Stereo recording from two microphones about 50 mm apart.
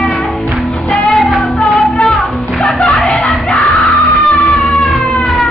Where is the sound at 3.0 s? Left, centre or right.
Centre.